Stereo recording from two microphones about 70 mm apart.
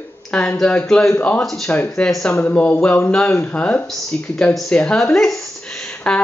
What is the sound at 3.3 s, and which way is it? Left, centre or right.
Speech, left.